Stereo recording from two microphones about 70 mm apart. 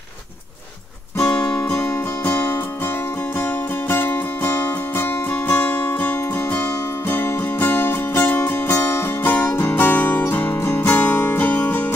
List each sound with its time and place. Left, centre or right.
1.4 s music: left
2.2 s music: left
3.9 s music: left